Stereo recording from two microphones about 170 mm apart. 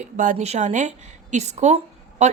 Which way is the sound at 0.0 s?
45° right (ahead or behind).